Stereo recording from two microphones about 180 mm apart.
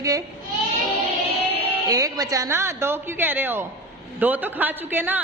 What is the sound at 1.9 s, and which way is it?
A woman's voice, 20° right (ahead or behind).